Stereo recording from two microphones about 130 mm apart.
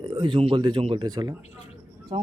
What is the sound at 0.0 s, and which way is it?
Speech, 35° right (ahead or behind).